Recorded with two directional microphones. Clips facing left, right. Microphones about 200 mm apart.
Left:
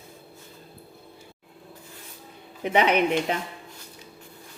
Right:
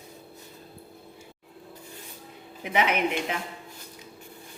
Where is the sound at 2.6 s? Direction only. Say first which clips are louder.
Left 4 dB; 35° left (ahead or behind).